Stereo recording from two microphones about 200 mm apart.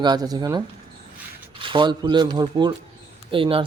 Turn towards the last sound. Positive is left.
turn(degrees=-25)  # may be behind; listen again after turning